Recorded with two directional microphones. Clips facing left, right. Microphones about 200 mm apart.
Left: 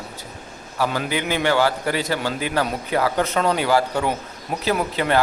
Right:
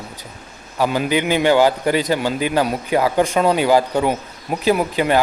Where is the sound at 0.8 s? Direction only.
15° right (ahead or behind).